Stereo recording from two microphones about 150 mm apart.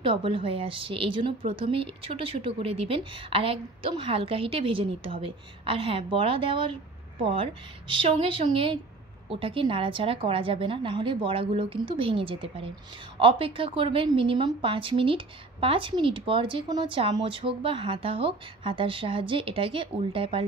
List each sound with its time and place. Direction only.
0.0 s a woman's voice: 35° right (ahead or behind)